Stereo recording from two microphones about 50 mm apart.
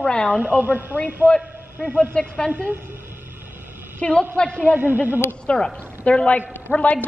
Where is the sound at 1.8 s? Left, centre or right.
Right.